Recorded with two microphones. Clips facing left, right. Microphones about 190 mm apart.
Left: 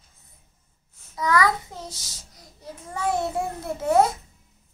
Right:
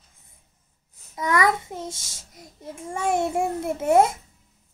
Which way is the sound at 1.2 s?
25° right (ahead or behind).